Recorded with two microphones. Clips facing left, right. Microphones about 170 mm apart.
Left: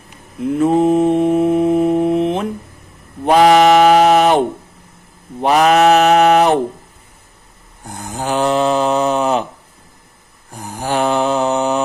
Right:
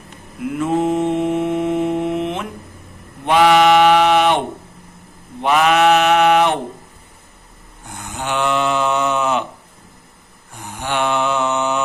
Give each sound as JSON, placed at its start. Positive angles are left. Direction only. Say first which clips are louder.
{"t": 0.5, "sound": "mantra", "louder": "left 5 dB", "side_deg": 35}
{"t": 7.9, "sound": "mantra", "louder": "left 4 dB", "side_deg": 35}
{"t": 10.5, "sound": "mantra", "louder": "left 4 dB", "side_deg": 35}